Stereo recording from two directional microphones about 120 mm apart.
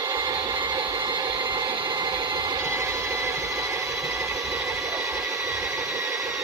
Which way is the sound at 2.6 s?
20° right (ahead or behind).